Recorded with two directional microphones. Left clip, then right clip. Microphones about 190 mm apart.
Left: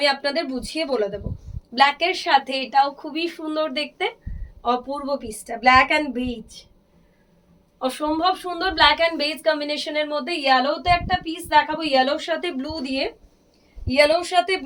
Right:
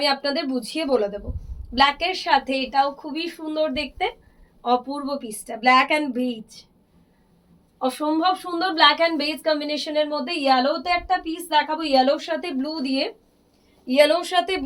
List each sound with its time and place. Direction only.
0.0 s a woman's voice: 15° left (ahead or behind)
7.8 s a woman's voice: 20° left (ahead or behind)